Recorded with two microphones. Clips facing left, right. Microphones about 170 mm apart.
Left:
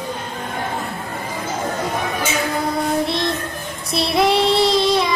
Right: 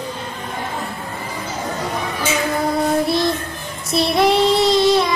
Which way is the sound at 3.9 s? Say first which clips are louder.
Right 2 dB; centre (ahead or behind).